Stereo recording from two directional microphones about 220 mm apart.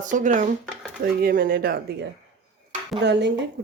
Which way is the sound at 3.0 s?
50° right (ahead or behind).